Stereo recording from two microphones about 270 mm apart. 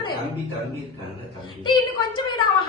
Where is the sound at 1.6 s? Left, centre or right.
Centre.